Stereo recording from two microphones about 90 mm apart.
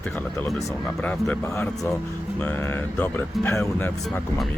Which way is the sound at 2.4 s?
20° left (ahead or behind).